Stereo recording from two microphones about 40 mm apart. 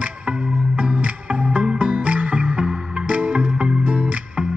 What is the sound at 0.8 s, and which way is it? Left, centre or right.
Music, right.